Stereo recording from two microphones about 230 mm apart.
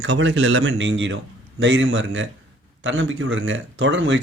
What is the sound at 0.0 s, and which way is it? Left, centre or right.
Speech, right.